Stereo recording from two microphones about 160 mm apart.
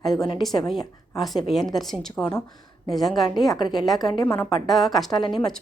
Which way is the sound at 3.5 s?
25° left (ahead or behind).